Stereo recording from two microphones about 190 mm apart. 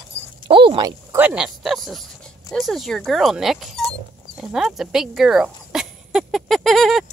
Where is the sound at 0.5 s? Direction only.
25° right (ahead or behind).